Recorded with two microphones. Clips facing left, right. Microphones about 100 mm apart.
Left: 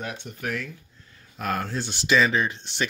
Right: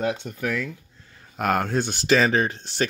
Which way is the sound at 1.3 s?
70° right (ahead or behind).